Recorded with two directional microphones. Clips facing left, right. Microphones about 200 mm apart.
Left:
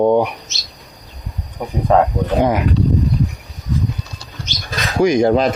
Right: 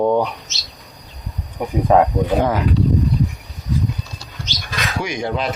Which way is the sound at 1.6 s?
5° right (ahead or behind).